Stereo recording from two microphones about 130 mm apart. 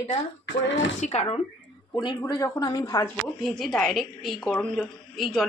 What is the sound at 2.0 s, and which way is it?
A woman's voice, 35° left (ahead or behind).